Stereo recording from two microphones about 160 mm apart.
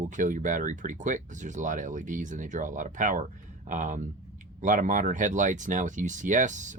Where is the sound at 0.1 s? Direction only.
50° right (ahead or behind).